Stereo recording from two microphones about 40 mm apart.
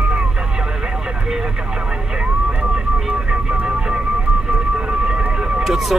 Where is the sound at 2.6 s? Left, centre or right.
Right.